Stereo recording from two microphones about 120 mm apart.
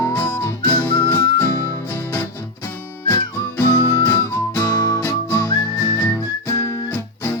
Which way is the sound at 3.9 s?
25° left (ahead or behind).